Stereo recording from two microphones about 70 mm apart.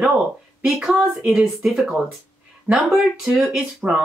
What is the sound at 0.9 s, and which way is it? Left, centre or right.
Speech, centre.